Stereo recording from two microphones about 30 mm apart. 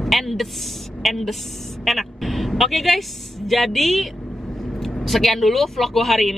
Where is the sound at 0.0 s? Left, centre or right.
Centre.